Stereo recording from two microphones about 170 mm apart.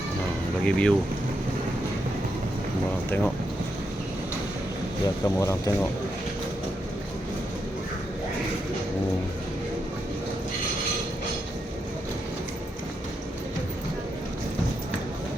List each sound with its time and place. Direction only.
0.6 s speech: 5° left (ahead or behind)
5.0 s speech: 20° left (ahead or behind)